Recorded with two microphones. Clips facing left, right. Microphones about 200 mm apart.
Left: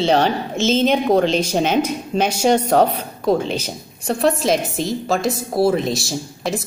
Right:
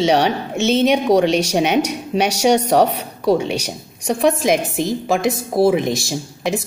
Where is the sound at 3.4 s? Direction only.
15° right (ahead or behind).